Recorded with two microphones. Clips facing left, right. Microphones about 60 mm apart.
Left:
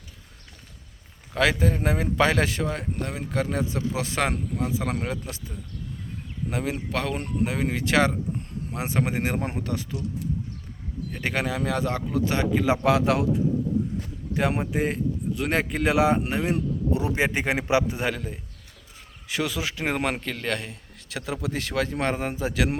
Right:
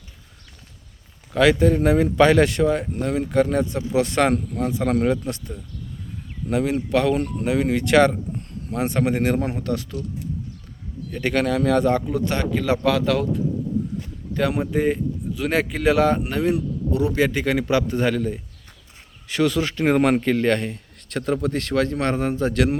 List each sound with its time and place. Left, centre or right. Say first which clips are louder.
1.3 s a man's voice: right 6 dB; centre
6.5 s a man's voice: right 8 dB; centre
9.4 s a man's voice: right 5 dB; left
11.1 s speech: right 6 dB; centre
14.6 s a man's voice: right 5 dB; centre